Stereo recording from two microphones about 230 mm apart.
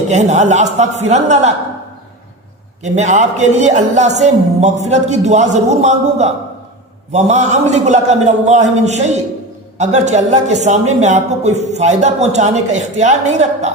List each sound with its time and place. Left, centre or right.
0.1 s speech: right
2.8 s a woman's voice: right